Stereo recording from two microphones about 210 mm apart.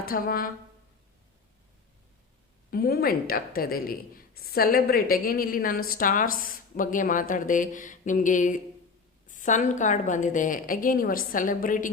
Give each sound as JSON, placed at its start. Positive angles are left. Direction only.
{"t": 0.0, "sound": "speech", "side_deg": 45}
{"t": 2.6, "sound": "speech", "side_deg": 45}